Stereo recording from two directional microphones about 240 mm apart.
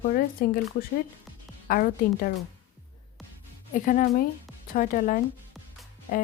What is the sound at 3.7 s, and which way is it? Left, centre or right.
Speech, left.